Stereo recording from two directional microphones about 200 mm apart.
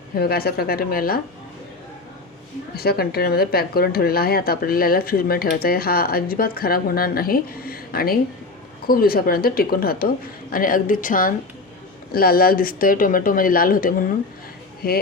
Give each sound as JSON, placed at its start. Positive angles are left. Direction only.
{"t": 0.2, "sound": "speech", "side_deg": 50}
{"t": 2.7, "sound": "speech", "side_deg": 50}